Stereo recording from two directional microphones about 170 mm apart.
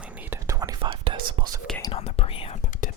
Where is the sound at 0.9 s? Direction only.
30° right (ahead or behind).